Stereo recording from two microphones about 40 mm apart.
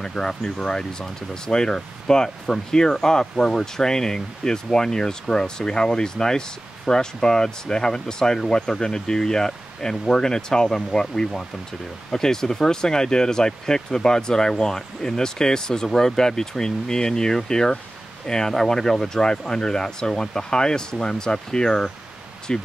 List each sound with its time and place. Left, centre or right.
0.0 s speech: centre